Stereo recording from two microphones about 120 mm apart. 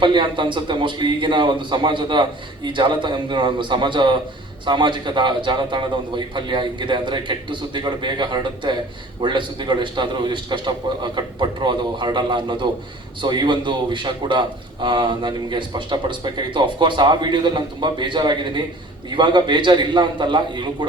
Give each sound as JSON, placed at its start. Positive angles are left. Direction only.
{"t": 0.0, "sound": "a man's voice", "side_deg": -40}